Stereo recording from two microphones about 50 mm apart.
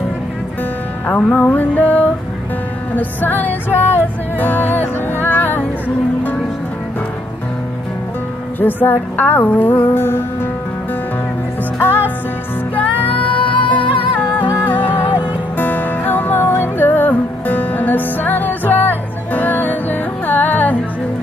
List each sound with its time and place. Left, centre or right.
1.0 s music: left
8.5 s music: left
12.7 s music: left